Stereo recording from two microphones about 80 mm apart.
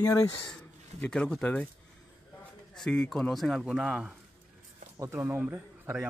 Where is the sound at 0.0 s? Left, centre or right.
Left.